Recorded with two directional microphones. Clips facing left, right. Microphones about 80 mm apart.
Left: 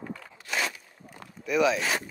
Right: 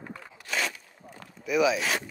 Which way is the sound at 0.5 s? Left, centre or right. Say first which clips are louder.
Even; centre.